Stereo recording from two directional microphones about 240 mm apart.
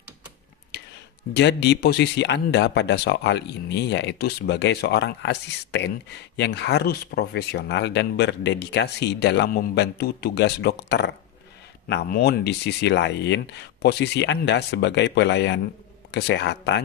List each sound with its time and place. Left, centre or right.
1.3 s speech: left